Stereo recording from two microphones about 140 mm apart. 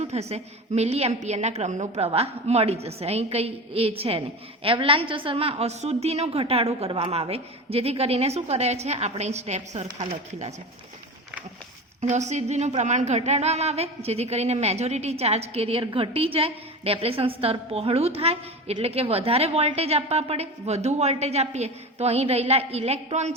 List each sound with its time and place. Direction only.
0.0 s a woman's voice: 50° right (ahead or behind)
11.9 s a woman's voice: 55° right (ahead or behind)